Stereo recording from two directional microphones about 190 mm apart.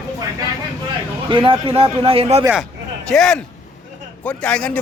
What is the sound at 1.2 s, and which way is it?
A man's voice, 25° right (ahead or behind).